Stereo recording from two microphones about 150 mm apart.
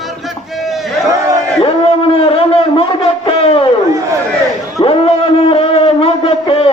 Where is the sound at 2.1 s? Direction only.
40° left (ahead or behind).